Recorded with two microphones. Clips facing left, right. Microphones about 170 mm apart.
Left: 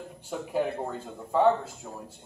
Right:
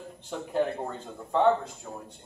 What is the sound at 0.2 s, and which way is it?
Speech, 5° left (ahead or behind).